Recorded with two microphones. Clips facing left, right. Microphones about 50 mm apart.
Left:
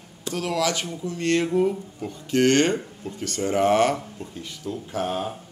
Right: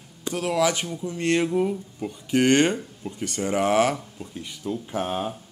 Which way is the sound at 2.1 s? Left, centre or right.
Centre.